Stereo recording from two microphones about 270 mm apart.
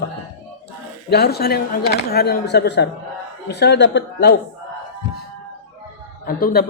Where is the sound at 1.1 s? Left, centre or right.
Left.